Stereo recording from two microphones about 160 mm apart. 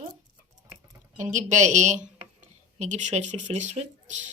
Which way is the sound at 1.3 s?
50° right (ahead or behind).